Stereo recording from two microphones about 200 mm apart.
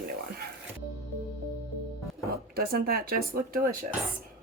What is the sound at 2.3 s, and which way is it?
Speech, 50° right (ahead or behind).